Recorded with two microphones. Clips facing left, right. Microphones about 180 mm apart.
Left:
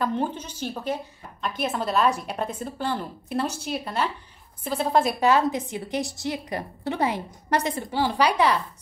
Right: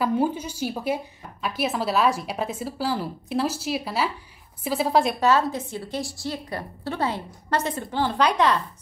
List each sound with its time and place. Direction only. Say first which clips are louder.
0.0 s a woman's voice: right 3 dB; 10° right (ahead or behind)
5.2 s a woman's voice: even; 15° left (ahead or behind)